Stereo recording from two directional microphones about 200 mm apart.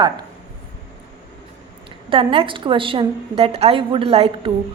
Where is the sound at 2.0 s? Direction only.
25° right (ahead or behind).